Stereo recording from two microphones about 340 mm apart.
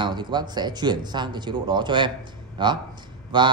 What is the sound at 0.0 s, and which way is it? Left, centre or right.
A man's voice, centre.